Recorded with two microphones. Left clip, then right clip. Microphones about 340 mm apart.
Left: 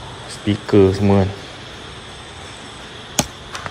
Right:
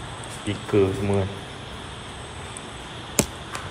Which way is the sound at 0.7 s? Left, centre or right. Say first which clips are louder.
Left 8 dB; left.